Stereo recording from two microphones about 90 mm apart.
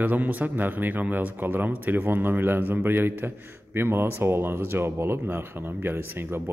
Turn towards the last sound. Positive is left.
turn(degrees=-25)  # may be behind; listen again after turning